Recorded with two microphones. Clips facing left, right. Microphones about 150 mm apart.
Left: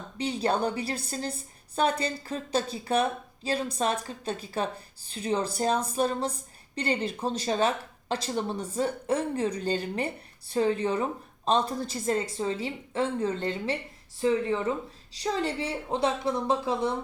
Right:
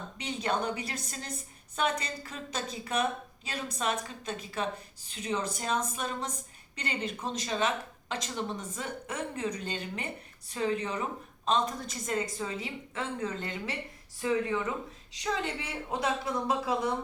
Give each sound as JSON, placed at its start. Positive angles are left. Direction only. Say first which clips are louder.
{"t": 0.2, "sound": "a woman's voice", "louder": "left 5 dB", "side_deg": 35}